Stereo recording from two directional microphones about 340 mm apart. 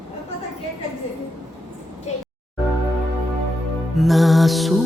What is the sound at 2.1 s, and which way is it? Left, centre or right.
Music, centre.